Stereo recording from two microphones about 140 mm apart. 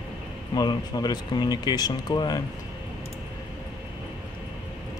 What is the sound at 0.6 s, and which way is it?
Speech, 30° left (ahead or behind).